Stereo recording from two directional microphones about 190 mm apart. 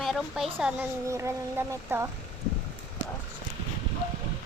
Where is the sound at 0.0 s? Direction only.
Centre (ahead or behind).